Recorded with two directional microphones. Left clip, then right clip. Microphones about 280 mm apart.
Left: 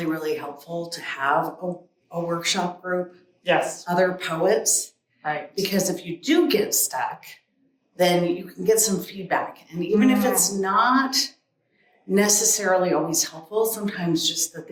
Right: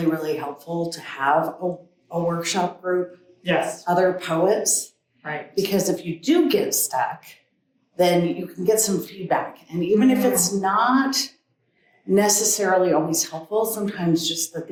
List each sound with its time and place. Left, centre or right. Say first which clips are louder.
0.0 s speech: right 3 dB; centre
3.4 s speech: left 1 dB; centre
3.8 s speech: right 2 dB; centre